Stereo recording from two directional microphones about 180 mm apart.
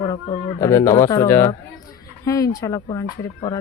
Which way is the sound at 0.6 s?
15° left (ahead or behind).